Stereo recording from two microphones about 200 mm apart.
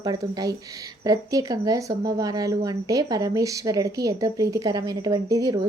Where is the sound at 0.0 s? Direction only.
20° right (ahead or behind).